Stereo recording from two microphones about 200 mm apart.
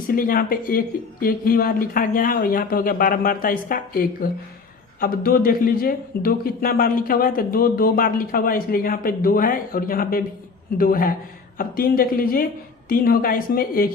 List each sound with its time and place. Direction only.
0.1 s a man's voice: 45° left (ahead or behind)